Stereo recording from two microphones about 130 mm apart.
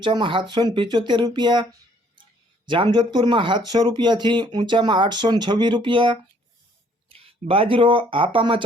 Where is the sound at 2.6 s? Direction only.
40° right (ahead or behind).